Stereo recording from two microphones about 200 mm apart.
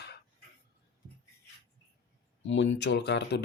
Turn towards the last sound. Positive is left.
turn(degrees=60)  # may be behind; listen again after turning